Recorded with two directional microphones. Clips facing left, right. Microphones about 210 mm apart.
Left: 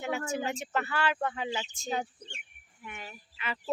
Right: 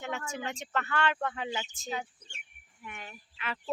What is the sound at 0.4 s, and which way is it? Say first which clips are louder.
Speech: left 3 dB; 5° left (ahead or behind).